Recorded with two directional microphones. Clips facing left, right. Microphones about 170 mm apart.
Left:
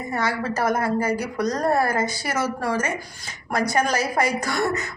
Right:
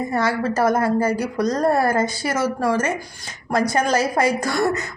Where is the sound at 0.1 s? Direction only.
30° right (ahead or behind).